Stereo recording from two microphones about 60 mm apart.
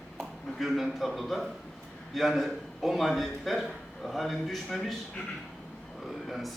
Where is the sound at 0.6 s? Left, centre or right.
Centre.